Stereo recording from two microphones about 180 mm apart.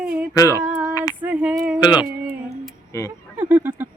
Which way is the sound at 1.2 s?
10° right (ahead or behind).